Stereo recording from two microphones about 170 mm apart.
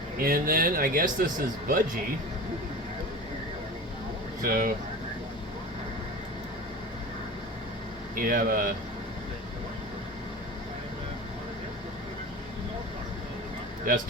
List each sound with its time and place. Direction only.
0.2 s speech: 60° right (ahead or behind)
4.4 s speech: 55° right (ahead or behind)
8.1 s speech: 55° right (ahead or behind)
13.9 s speech: 60° right (ahead or behind)